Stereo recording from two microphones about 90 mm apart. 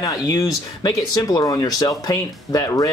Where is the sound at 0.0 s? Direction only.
40° left (ahead or behind).